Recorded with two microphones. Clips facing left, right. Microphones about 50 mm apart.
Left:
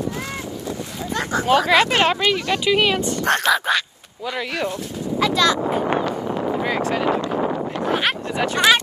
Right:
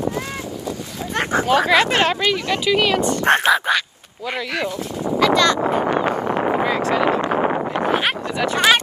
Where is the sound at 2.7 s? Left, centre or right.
Centre.